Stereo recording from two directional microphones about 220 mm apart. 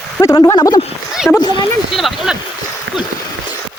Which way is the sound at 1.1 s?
Centre (ahead or behind).